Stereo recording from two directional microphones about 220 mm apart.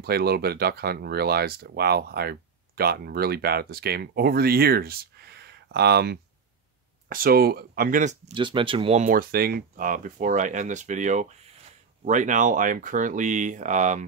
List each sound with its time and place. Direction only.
0.0 s speech: 45° right (ahead or behind)
8.4 s speech: 20° right (ahead or behind)